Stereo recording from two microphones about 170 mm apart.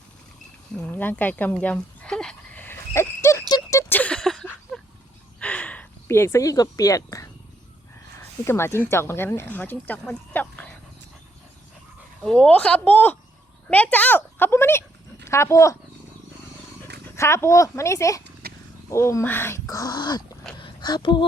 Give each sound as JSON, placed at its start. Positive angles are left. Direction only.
{"t": 0.9, "sound": "a sound", "side_deg": 10}
{"t": 4.7, "sound": "dog", "side_deg": 0}
{"t": 5.4, "sound": "a sound", "side_deg": 5}
{"t": 8.4, "sound": "speech", "side_deg": 15}
{"t": 12.2, "sound": "a woman's voice", "side_deg": 5}
{"t": 17.2, "sound": "speech", "side_deg": 15}
{"t": 18.4, "sound": "wild animals", "side_deg": -65}
{"t": 18.9, "sound": "speech", "side_deg": 15}
{"t": 20.6, "sound": "a sound", "side_deg": 25}